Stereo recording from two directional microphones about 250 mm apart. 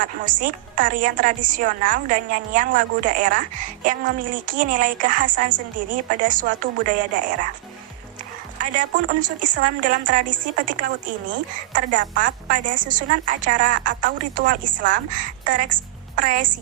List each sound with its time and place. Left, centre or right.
0.0 s speech: right
8.5 s speech: right